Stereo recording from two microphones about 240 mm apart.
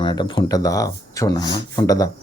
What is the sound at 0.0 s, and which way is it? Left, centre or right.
Speech, centre.